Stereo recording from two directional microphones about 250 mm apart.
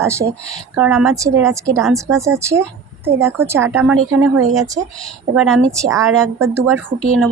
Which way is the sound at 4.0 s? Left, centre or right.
Right.